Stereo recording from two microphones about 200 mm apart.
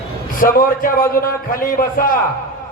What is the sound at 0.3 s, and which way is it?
A man's voice, 45° left (ahead or behind).